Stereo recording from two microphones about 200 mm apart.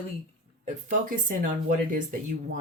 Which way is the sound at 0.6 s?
40° right (ahead or behind).